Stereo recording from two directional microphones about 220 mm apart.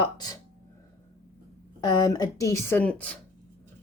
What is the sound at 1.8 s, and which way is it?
A woman's voice, 20° left (ahead or behind).